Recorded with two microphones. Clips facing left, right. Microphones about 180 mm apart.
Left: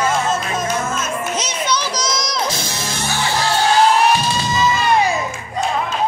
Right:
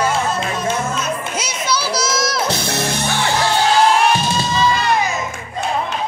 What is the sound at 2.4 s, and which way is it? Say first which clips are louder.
Music: right 4 dB; 65° right (ahead or behind).